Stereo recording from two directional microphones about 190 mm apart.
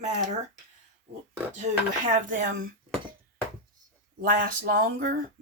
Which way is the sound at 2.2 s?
45° right (ahead or behind).